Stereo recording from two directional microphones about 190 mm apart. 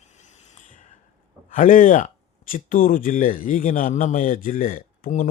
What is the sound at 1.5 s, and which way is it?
A man's voice, 45° left (ahead or behind).